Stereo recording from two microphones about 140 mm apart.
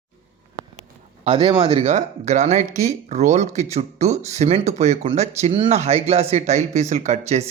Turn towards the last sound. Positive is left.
turn(degrees=-50)  # may be behind; listen again after turning